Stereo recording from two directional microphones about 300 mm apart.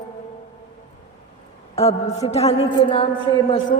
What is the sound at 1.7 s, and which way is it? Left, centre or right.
A woman's voice, centre.